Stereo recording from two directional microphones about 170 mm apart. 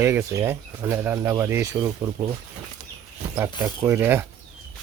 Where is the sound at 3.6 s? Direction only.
10° right (ahead or behind).